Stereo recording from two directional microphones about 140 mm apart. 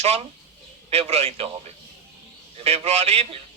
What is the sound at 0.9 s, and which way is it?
Speech, 45° right (ahead or behind).